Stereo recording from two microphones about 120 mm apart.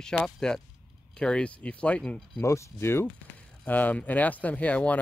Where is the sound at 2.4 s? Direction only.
20° left (ahead or behind).